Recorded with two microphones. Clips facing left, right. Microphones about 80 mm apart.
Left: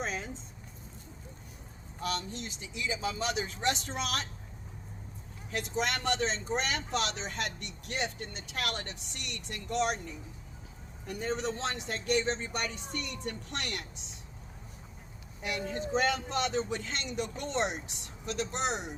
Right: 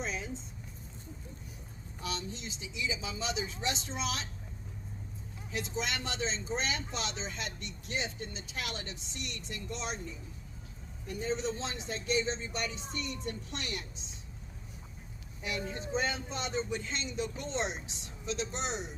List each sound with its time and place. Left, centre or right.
0.0 s vehicle: left
2.0 s speech: left
5.5 s speech: left
15.4 s speech: left